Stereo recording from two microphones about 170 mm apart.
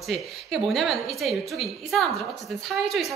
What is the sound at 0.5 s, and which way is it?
A woman's voice, centre (ahead or behind).